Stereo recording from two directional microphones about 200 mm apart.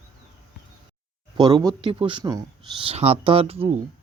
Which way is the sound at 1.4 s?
20° right (ahead or behind).